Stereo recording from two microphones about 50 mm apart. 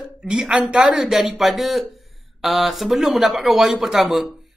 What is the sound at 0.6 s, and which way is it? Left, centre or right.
Speech, right.